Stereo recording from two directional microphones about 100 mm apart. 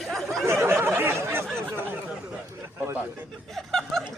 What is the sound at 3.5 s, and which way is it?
Speech, 5° left (ahead or behind).